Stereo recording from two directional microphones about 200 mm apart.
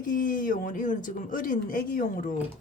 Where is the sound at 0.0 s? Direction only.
40° left (ahead or behind).